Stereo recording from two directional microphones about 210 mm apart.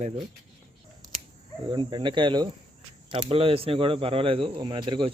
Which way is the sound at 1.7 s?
25° right (ahead or behind).